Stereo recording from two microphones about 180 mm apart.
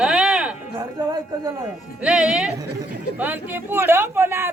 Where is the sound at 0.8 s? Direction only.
25° right (ahead or behind).